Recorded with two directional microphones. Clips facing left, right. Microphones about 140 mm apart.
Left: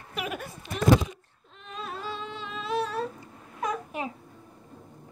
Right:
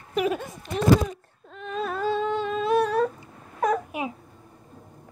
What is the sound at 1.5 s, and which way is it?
Humming, 50° right (ahead or behind).